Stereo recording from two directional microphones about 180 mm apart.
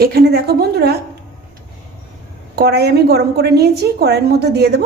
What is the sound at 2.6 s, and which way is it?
A woman's voice, 65° right (ahead or behind).